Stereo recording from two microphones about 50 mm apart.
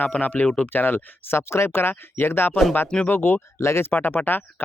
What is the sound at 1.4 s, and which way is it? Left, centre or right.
Speech, left.